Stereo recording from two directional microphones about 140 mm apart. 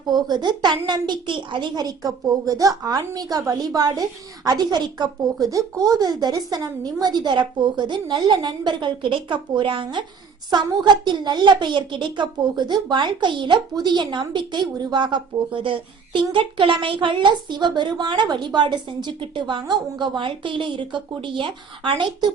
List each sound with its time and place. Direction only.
0.1 s a child's voice: 30° right (ahead or behind)